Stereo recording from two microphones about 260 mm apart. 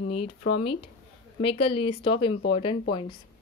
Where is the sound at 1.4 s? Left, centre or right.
Left.